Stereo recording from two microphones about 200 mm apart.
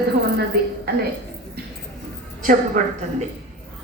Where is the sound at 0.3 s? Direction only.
55° right (ahead or behind).